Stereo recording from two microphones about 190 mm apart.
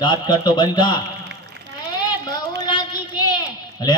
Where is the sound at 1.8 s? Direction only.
20° left (ahead or behind).